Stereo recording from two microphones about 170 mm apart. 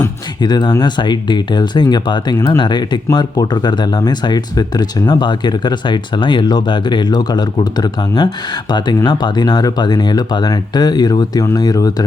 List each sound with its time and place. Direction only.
0.0 s speech: 25° left (ahead or behind)